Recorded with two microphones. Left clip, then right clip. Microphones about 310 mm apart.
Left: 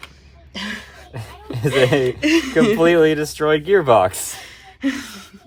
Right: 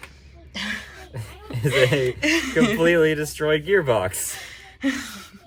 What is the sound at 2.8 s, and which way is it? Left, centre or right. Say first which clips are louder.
Speech: left 3 dB; centre.